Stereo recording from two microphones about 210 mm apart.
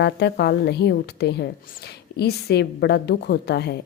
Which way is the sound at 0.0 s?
55° left (ahead or behind).